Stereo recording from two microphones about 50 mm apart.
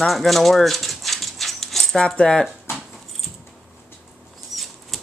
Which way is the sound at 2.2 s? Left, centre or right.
Left.